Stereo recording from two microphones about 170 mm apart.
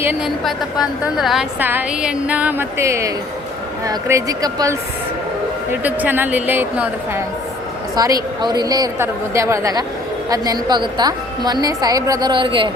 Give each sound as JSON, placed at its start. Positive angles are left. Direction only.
{"t": 0.3, "sound": "a woman's voice", "side_deg": 0}
{"t": 5.8, "sound": "a woman's voice", "side_deg": -10}